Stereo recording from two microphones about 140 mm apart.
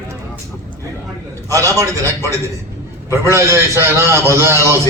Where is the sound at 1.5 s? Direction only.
25° right (ahead or behind).